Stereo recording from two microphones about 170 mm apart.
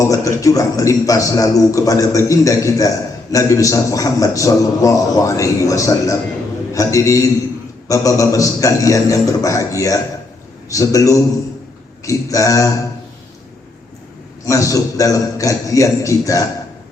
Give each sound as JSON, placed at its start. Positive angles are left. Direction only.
{"t": 0.0, "sound": "a man's voice", "side_deg": 20}
{"t": 14.4, "sound": "a man's voice", "side_deg": 20}